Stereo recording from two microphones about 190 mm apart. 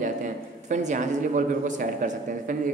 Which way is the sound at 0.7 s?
40° right (ahead or behind).